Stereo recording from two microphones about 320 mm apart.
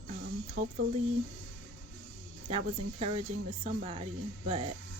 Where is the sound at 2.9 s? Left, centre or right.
Centre.